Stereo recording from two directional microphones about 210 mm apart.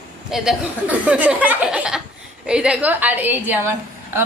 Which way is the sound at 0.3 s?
5° right (ahead or behind).